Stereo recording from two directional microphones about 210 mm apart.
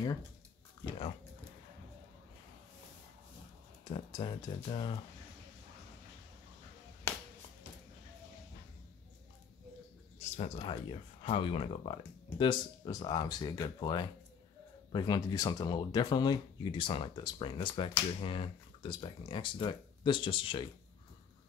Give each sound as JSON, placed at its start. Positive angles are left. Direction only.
{"t": 3.9, "sound": "speech", "side_deg": 20}
{"t": 10.3, "sound": "speech", "side_deg": 30}